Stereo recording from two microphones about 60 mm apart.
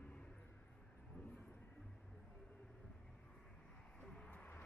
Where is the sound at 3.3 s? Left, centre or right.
Centre.